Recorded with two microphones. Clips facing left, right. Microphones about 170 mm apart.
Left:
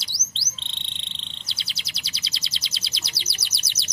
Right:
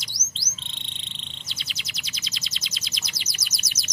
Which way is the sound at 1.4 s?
30° left (ahead or behind).